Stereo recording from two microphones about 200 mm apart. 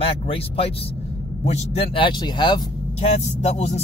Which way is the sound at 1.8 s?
25° left (ahead or behind).